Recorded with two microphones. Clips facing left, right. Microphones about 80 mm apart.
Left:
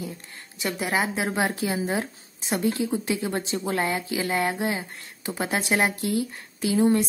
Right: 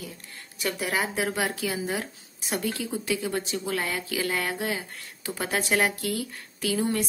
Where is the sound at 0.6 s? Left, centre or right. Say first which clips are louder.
Left 2 dB; left.